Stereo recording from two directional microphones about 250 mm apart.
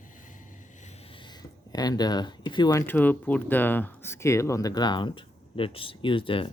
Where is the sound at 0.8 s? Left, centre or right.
Left.